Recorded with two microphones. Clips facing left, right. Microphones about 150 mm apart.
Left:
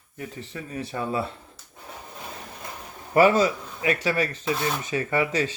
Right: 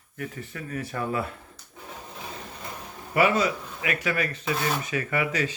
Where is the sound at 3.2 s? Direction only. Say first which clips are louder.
Left 4 dB; 30° left (ahead or behind).